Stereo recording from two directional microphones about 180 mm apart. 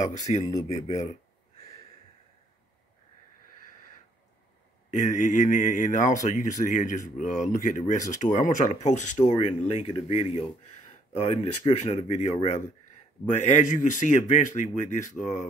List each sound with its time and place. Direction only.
0.5 s speech: 20° left (ahead or behind)
4.9 s speech: 45° left (ahead or behind)